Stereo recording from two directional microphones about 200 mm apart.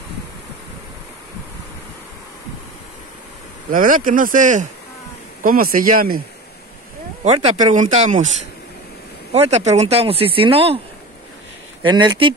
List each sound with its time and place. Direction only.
3.7 s speech: 45° right (ahead or behind)
7.2 s speech: 30° right (ahead or behind)
9.3 s speech: 35° right (ahead or behind)
11.8 s speech: 20° right (ahead or behind)